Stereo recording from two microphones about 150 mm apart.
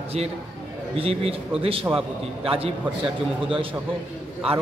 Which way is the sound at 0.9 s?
40° right (ahead or behind).